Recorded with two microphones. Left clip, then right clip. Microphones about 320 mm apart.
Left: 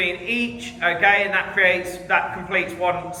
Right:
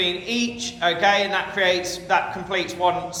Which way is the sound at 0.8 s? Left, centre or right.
Centre.